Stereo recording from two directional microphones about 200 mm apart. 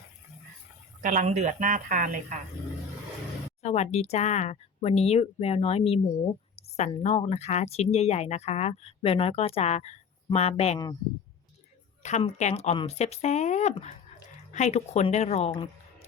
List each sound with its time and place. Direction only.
1.0 s speech: 35° right (ahead or behind)
3.6 s speech: 35° left (ahead or behind)
12.0 s speech: 35° left (ahead or behind)